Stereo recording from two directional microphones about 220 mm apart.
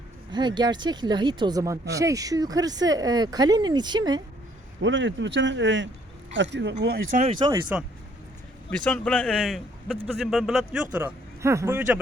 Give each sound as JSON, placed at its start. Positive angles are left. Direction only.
{"t": 0.3, "sound": "speech", "side_deg": -20}
{"t": 4.8, "sound": "speech", "side_deg": -55}
{"t": 7.2, "sound": "speech", "side_deg": -20}
{"t": 8.8, "sound": "speech", "side_deg": 5}
{"t": 10.9, "sound": "speech", "side_deg": -10}